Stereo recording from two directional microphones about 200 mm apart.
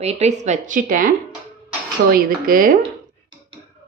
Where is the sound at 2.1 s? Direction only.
45° right (ahead or behind).